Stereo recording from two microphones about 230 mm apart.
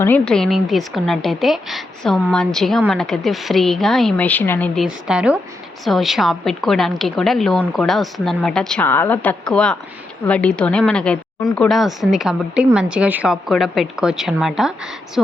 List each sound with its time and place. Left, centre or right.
0.0 s a woman's voice: centre